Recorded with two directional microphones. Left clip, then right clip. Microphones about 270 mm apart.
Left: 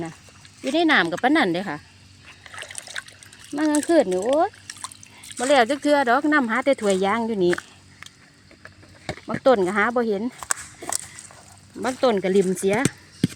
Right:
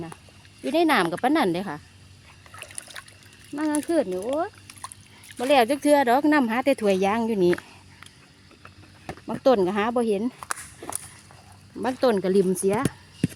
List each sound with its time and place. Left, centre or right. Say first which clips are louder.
0.6 s speech: left 2 dB; centre
2.4 s trickle: left 5 dB; left
3.6 s speech: left 4 dB; left
3.8 s speech: left 7 dB; centre
4.1 s speech: left 6 dB; left
5.5 s speech: left 1 dB; centre
9.2 s speech: left 2 dB; centre
10.4 s walk: left 4 dB; left
11.8 s speech: left 2 dB; centre